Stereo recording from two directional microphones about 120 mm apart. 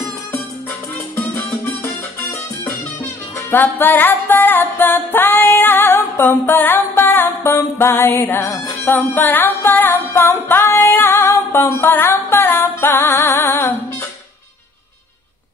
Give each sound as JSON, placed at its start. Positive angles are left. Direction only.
{"t": 1.1, "sound": "music", "side_deg": 20}